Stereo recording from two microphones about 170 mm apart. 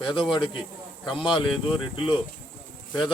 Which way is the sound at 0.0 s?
30° left (ahead or behind).